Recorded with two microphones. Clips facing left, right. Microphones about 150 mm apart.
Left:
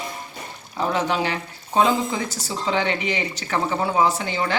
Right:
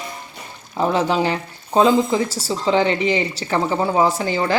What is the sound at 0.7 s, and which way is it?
Speech, 35° right (ahead or behind).